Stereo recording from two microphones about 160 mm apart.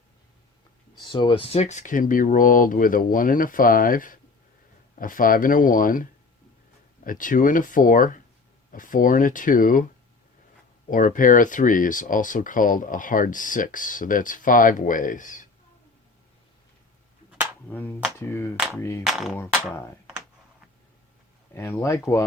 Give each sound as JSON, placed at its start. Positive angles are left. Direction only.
{"t": 1.0, "sound": "speech", "side_deg": 30}
{"t": 10.8, "sound": "speech", "side_deg": 55}
{"t": 17.7, "sound": "speech", "side_deg": 10}
{"t": 19.0, "sound": "a sound", "side_deg": 0}
{"t": 21.5, "sound": "speech", "side_deg": 15}